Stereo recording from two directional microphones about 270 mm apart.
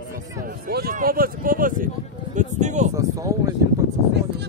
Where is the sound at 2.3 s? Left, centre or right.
Right.